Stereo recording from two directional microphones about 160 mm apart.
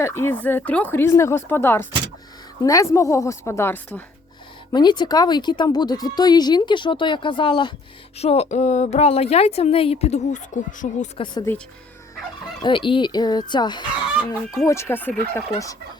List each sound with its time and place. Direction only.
0.0 s speech: 15° left (ahead or behind)
4.7 s a woman's voice: 25° left (ahead or behind); by 11.1 s 50° left (ahead or behind)
11.5 s speech: 15° left (ahead or behind)
12.6 s speech: 30° left (ahead or behind)
14.1 s chicken: 5° right (ahead or behind)
14.7 s speech: 15° left (ahead or behind)